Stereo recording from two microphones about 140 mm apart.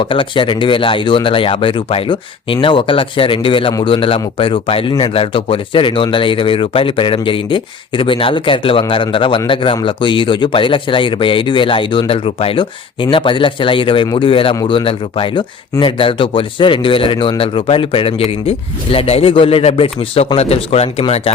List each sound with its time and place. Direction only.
0.0 s speech: 40° left (ahead or behind)